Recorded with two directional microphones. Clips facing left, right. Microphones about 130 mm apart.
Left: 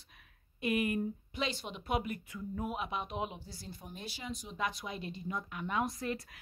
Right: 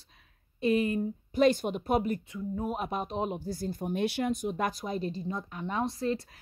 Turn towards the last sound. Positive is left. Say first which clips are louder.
# right 5 dB
turn(degrees=-30)  # may be behind; listen again after turning